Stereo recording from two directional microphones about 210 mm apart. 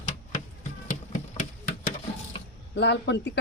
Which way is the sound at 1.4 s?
40° left (ahead or behind).